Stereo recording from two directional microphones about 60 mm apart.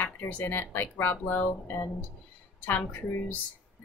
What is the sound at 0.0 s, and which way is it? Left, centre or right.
A woman's voice, left.